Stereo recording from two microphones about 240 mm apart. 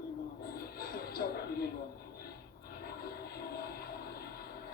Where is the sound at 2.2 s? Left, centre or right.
Left.